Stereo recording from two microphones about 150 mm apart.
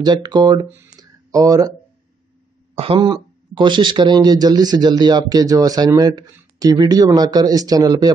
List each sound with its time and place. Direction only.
0.0 s speech: 30° right (ahead or behind)
0.8 s a sound: 25° right (ahead or behind)
2.8 s speech: 35° right (ahead or behind)